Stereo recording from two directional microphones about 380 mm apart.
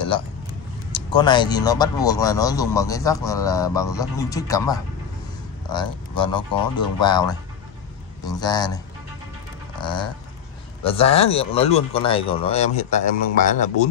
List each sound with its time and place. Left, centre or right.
0.9 s speech: centre